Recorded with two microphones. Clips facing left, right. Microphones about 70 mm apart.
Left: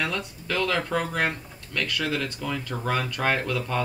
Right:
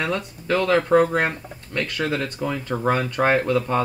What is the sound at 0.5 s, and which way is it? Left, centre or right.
Speech, right.